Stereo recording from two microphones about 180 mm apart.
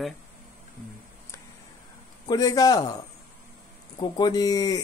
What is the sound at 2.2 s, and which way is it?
Speech, 20° left (ahead or behind).